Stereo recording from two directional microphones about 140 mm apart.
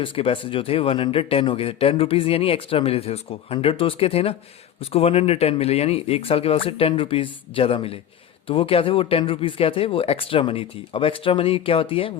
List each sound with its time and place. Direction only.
0.0 s a man's voice: 40° left (ahead or behind)